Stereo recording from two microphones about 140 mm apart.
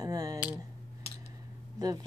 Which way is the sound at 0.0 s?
25° right (ahead or behind).